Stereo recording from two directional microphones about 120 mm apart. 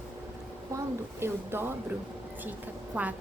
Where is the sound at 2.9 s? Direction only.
10° right (ahead or behind).